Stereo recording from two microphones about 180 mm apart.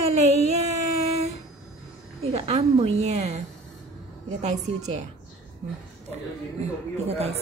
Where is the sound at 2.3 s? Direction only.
35° right (ahead or behind).